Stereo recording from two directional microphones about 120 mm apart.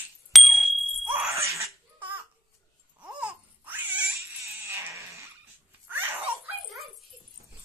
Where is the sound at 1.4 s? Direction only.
25° right (ahead or behind).